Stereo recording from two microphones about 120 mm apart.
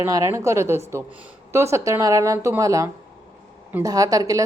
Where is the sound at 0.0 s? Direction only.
25° right (ahead or behind).